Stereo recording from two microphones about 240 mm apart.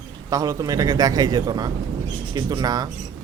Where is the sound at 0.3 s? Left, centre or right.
Centre.